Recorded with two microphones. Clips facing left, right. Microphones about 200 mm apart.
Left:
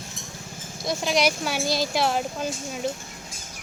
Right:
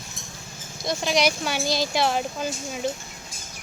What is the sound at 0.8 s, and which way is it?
Speech, centre (ahead or behind).